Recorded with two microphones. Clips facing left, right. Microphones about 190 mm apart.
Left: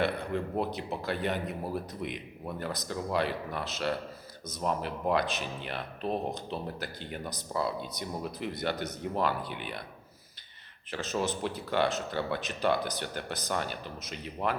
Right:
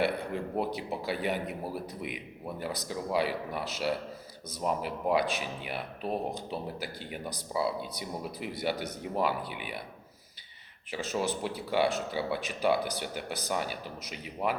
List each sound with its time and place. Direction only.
0.0 s speech: 10° right (ahead or behind)
10.9 s speech: 10° right (ahead or behind)